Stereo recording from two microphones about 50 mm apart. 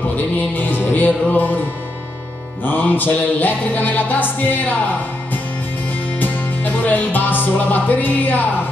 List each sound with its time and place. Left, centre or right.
0.4 s music: left
6.1 s music: left